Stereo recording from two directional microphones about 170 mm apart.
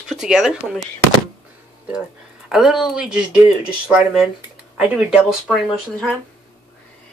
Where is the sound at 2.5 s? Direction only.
5° right (ahead or behind).